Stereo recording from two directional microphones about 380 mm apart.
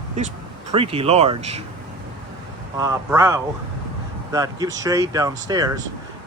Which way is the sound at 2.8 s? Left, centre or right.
Centre.